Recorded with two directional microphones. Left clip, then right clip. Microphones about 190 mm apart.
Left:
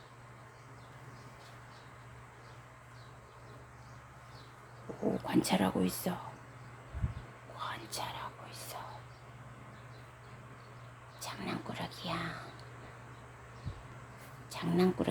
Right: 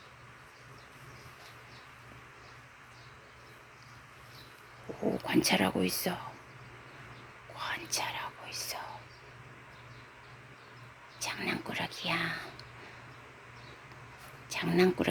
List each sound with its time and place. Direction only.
4.9 s speech: centre (ahead or behind)
7.5 s whispering: centre (ahead or behind)
11.2 s a sound: 5° right (ahead or behind)
11.9 s whispering: 5° right (ahead or behind)
14.5 s speech: 5° right (ahead or behind)